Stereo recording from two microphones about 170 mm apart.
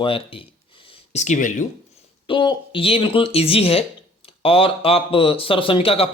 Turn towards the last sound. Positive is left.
turn(degrees=35)  # may be behind; listen again after turning